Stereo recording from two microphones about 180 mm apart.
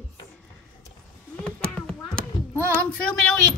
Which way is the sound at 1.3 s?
5° left (ahead or behind).